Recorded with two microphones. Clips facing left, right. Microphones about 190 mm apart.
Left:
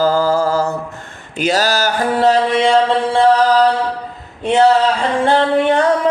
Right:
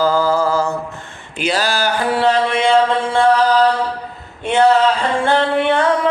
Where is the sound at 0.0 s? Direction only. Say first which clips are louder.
Left 1 dB; 45° left (ahead or behind).